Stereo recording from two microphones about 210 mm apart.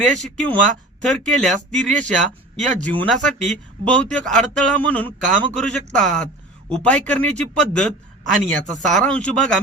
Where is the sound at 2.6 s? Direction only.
35° right (ahead or behind).